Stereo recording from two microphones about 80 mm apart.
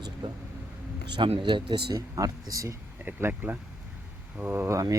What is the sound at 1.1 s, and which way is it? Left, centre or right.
Speech, right.